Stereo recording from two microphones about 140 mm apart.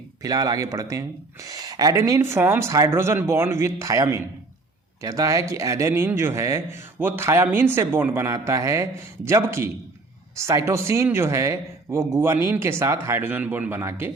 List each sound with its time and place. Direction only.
0.2 s speech: 25° right (ahead or behind)